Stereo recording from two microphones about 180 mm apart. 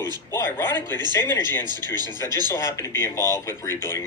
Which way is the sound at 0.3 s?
15° left (ahead or behind).